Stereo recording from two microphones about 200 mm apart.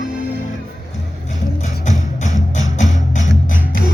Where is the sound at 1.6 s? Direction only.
35° left (ahead or behind).